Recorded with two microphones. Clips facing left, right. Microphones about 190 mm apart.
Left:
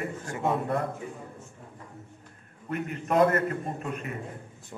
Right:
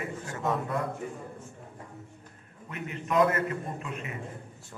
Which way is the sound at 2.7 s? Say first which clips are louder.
Left 4 dB; 50° left (ahead or behind).